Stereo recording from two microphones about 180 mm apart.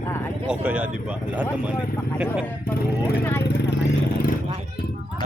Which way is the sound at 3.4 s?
70° left (ahead or behind).